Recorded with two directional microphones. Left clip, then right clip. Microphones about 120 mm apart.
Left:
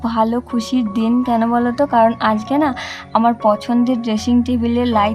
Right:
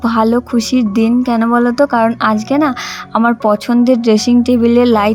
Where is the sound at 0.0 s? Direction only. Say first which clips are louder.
Right 5 dB; 30° right (ahead or behind).